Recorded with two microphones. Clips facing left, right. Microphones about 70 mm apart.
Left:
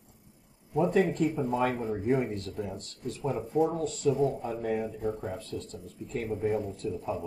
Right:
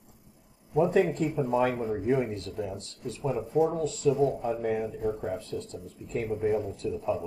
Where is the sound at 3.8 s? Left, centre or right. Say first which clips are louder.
Right 2 dB; left.